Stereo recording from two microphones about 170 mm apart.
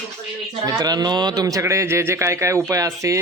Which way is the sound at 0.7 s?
25° right (ahead or behind).